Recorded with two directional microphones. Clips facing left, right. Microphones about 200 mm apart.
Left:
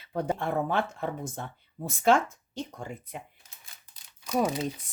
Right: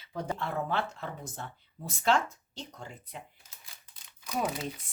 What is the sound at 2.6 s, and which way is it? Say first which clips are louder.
Speech: left 7 dB; 55° left (ahead or behind).